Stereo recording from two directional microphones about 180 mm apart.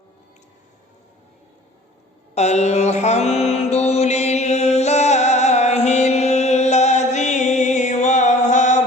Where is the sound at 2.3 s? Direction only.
40° left (ahead or behind).